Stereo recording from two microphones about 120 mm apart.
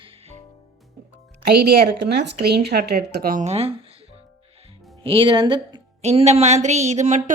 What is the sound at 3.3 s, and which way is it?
Speech, 65° right (ahead or behind).